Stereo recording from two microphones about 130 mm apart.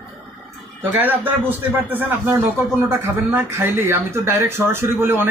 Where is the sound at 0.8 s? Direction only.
15° right (ahead or behind).